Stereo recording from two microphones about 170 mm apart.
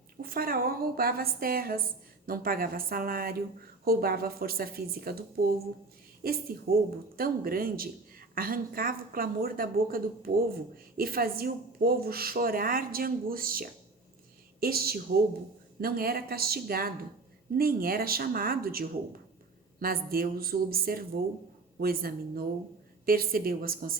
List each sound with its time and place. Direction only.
0.2 s a woman's voice: 60° right (ahead or behind)
6.2 s a woman's voice: 60° right (ahead or behind)